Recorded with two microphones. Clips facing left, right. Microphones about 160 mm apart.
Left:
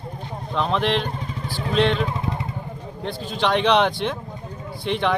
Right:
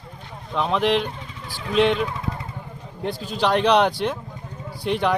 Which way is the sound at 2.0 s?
25° left (ahead or behind).